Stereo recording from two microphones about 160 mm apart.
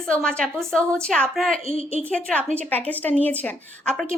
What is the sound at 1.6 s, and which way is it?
Speech, 40° left (ahead or behind).